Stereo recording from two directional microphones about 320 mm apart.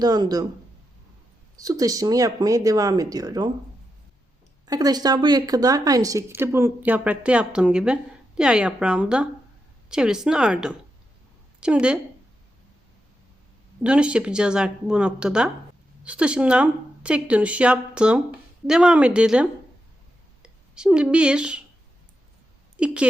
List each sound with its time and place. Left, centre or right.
0.0 s a woman's voice: centre
1.5 s a woman's voice: centre
4.6 s a woman's voice: centre
13.8 s speech: centre